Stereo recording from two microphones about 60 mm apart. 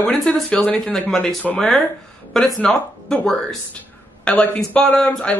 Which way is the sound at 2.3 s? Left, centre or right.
Centre.